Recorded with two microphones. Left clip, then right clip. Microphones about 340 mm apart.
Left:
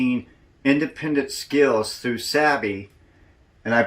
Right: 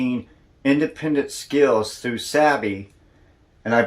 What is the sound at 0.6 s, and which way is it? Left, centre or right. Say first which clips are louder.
Speech: right 1 dB; centre.